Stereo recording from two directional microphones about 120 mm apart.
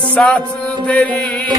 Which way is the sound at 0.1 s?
10° left (ahead or behind).